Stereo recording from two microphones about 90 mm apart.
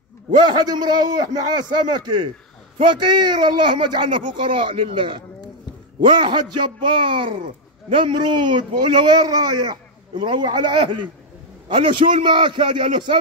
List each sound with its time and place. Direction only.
0.3 s a man's voice: 60° right (ahead or behind)
11.7 s a man's voice: 70° right (ahead or behind)